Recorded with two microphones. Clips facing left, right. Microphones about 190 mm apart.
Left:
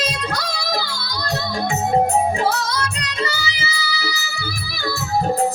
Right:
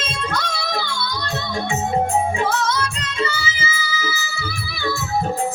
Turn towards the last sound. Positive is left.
turn(degrees=35)  # may be behind; listen again after turning